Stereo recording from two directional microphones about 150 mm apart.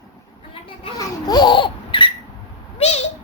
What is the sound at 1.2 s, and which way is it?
Laughter, 30° left (ahead or behind).